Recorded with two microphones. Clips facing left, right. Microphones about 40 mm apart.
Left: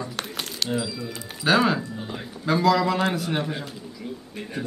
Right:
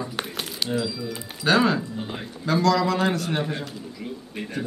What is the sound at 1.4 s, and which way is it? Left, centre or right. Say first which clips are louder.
Speech: even; centre.